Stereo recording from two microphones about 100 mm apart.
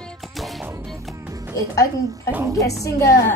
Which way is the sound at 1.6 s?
35° left (ahead or behind).